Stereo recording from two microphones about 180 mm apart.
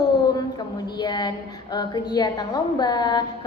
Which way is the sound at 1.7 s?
25° left (ahead or behind).